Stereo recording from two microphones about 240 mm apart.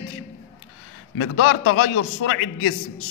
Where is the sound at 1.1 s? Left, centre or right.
Left.